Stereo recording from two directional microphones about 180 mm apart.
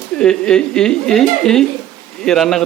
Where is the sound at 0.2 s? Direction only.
5° left (ahead or behind).